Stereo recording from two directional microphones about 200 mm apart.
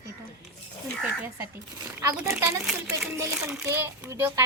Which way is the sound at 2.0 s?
10° right (ahead or behind).